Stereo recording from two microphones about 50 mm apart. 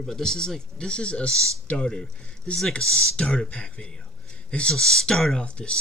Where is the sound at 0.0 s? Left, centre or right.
Centre.